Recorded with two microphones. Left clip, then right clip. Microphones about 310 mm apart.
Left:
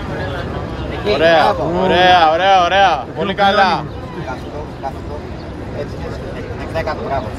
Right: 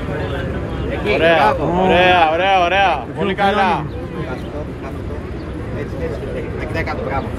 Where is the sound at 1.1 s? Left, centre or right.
Left.